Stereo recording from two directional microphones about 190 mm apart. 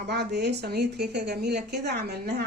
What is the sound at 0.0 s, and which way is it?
A woman's voice, 60° right (ahead or behind).